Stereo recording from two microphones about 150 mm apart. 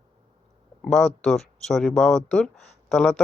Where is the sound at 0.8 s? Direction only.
Centre (ahead or behind).